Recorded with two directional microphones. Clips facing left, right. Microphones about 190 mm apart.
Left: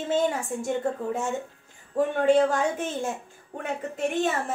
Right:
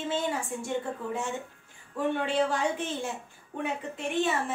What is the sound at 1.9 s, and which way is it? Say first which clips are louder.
A woman's voice: left 7 dB; 40° left (ahead or behind).